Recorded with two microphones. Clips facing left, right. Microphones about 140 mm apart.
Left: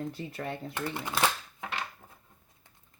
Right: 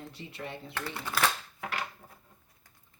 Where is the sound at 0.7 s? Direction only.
20° left (ahead or behind).